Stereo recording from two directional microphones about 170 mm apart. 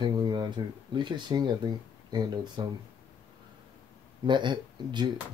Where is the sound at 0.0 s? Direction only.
25° right (ahead or behind).